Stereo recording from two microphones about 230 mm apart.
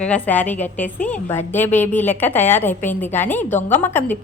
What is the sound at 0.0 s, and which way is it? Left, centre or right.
A woman's voice, centre.